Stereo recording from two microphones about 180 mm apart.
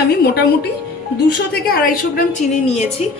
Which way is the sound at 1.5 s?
55° left (ahead or behind).